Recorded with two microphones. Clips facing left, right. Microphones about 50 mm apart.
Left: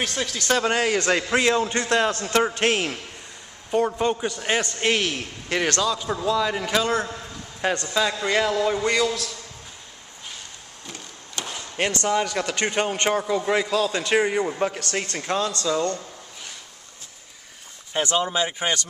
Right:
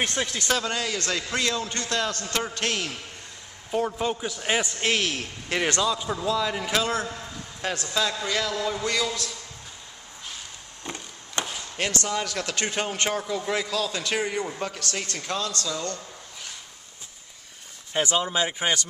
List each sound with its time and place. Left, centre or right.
0.0 s speech: right
0.7 s a man's voice: left
1.3 s a man's voice: left
3.7 s a man's voice: centre
4.7 s a man's voice: centre
5.7 s speech: centre
6.0 s a man's voice: centre
7.9 s a man's voice: centre
8.7 s a man's voice: centre
11.4 s a sound: right
11.7 s a man's voice: centre
17.9 s a man's voice: centre
18.3 s speech: centre